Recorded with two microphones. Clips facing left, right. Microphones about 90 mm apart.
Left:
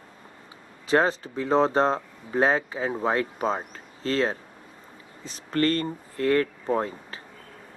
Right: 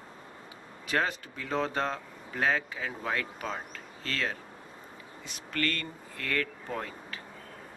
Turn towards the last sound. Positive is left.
turn(degrees=30)  # may be behind; listen again after turning